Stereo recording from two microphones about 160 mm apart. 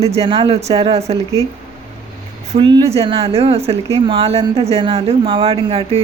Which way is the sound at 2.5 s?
35° right (ahead or behind).